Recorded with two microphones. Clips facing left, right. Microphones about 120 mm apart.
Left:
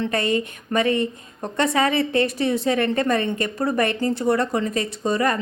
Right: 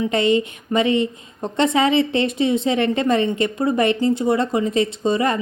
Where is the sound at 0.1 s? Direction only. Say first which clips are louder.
Right 4 dB; 20° right (ahead or behind).